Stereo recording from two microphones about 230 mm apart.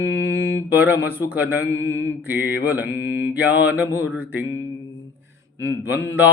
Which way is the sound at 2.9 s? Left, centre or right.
Left.